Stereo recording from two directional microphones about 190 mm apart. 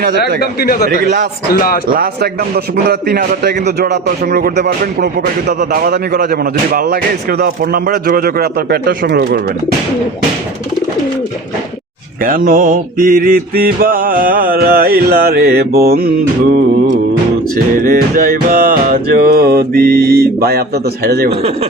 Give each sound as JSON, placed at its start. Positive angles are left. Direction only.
{"t": 0.3, "sound": "speech", "side_deg": 55}
{"t": 0.9, "sound": "mantra", "side_deg": -50}
{"t": 1.5, "sound": "speech", "side_deg": 50}
{"t": 1.9, "sound": "mantra", "side_deg": -55}
{"t": 2.9, "sound": "a man's voice", "side_deg": -55}
{"t": 12.2, "sound": "mantra", "side_deg": -45}
{"t": 17.7, "sound": "mantra", "side_deg": -50}